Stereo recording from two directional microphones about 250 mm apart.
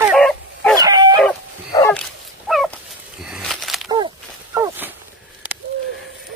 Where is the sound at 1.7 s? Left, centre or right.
Centre.